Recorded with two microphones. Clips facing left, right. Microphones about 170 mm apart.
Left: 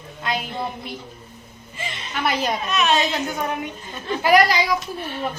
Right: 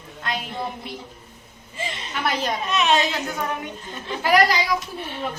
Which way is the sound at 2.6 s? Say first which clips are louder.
Right 1 dB; 20° right (ahead or behind).